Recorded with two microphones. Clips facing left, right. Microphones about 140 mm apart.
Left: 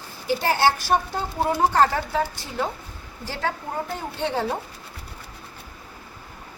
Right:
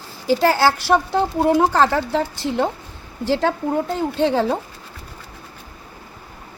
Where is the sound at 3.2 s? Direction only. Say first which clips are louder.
Right 9 dB; 90° right.